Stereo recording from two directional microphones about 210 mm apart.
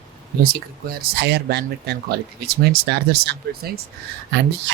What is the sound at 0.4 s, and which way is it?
Speech, 50° right (ahead or behind).